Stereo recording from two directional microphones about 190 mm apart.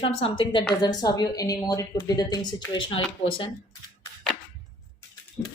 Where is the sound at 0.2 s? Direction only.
25° left (ahead or behind).